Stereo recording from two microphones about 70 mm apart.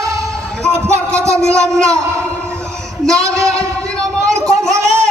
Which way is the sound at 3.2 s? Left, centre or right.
Right.